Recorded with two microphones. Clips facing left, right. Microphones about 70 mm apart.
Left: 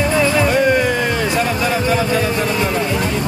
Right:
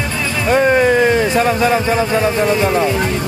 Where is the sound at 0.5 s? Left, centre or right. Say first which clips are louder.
Right 3 dB; right.